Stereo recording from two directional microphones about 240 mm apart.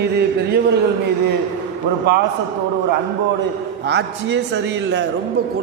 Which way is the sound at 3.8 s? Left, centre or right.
Right.